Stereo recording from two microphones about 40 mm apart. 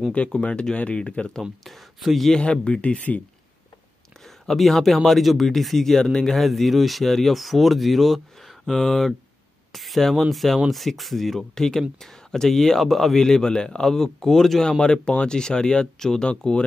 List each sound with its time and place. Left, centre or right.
0.1 s speech: left
1.6 s speech: centre
2.3 s speech: left
4.5 s speech: centre
9.7 s a sound: centre
10.3 s speech: centre; by 16.6 s left